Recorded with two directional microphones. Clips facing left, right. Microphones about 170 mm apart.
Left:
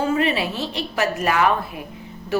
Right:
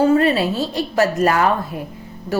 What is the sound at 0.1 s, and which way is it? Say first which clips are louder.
A woman's voice: right 6 dB; 40° right (ahead or behind).